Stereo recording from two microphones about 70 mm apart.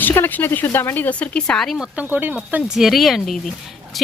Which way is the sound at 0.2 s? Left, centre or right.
Left.